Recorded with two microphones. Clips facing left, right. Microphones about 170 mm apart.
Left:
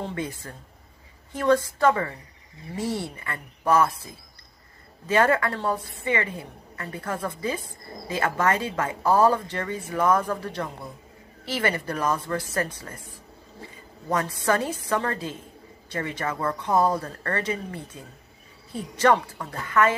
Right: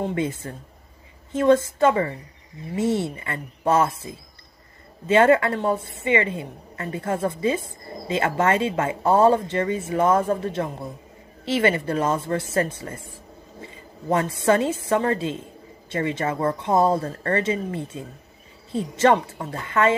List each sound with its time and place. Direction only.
0.0 s a woman's voice: 20° right (ahead or behind)